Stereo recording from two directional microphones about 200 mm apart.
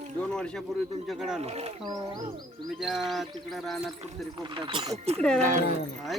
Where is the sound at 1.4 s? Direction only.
30° right (ahead or behind).